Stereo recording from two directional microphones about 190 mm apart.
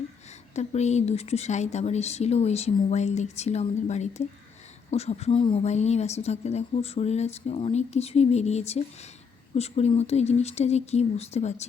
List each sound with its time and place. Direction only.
0.5 s a woman's voice: 35° left (ahead or behind)